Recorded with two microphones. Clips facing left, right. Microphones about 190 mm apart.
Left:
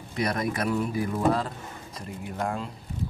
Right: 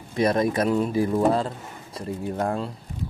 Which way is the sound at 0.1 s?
25° right (ahead or behind).